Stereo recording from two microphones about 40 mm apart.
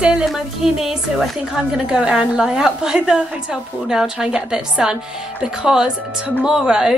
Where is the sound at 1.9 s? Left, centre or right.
Right.